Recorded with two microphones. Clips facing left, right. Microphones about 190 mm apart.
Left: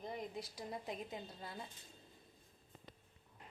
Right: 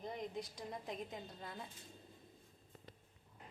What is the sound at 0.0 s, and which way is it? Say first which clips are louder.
A woman's voice: right 1 dB; 5° left (ahead or behind).